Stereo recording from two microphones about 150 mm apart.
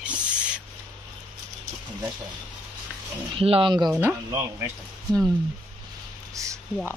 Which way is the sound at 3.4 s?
35° right (ahead or behind).